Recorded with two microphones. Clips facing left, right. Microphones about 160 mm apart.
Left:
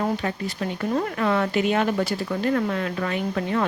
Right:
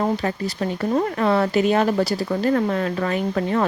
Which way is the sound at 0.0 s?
35° right (ahead or behind).